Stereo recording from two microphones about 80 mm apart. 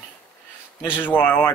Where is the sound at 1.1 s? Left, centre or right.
Left.